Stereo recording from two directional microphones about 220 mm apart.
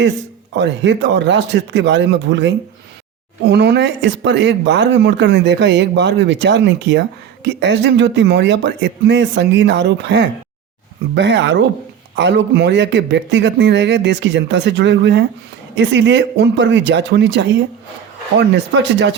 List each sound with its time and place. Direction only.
0.5 s speech: 55° right (ahead or behind)